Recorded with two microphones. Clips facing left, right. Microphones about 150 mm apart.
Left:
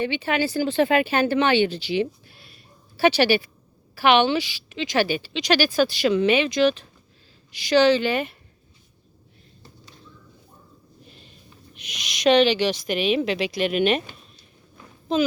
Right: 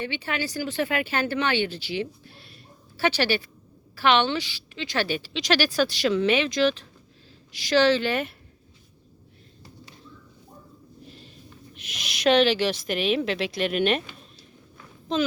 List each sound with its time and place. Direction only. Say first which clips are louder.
0.0 s speech: left 6 dB; 20° left (ahead or behind)
5.0 s speech: left 3 dB; centre (ahead or behind)
11.7 s speech: left 1 dB; centre (ahead or behind)
15.1 s speech: left 3 dB; 5° left (ahead or behind)